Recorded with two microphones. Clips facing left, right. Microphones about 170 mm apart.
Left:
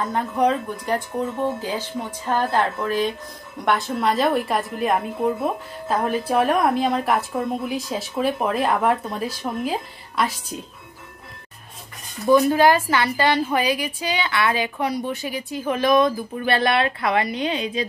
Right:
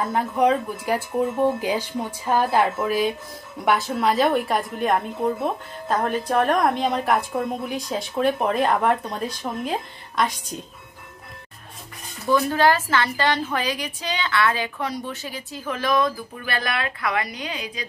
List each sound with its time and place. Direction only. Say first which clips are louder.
0.0 s a woman's voice: even; 5° right (ahead or behind)
12.3 s a woman's voice: left 4 dB; 15° left (ahead or behind)